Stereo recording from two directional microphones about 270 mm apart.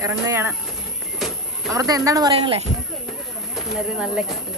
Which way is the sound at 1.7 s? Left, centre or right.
Centre.